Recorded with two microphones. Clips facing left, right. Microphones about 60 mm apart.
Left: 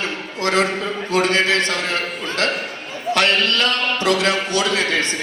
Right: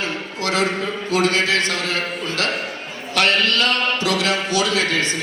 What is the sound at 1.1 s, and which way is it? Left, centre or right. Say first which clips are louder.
Speech: left 1 dB; left.